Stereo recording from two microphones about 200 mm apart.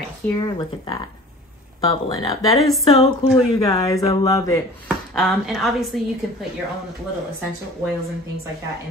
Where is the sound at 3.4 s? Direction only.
20° left (ahead or behind).